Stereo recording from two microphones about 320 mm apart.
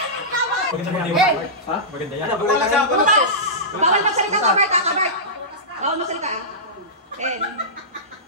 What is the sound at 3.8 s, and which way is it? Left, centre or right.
Speech, centre.